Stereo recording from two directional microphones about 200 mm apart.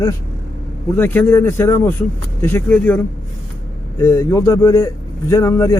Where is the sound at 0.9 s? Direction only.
10° left (ahead or behind).